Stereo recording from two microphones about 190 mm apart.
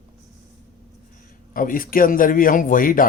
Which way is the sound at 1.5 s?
45° left (ahead or behind).